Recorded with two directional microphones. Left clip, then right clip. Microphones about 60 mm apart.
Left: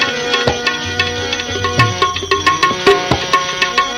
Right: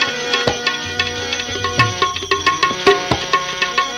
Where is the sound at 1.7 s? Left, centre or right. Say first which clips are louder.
Left 2 dB; right.